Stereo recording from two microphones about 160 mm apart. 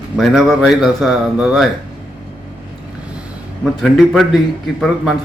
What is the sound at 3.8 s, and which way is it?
A man's voice, centre (ahead or behind).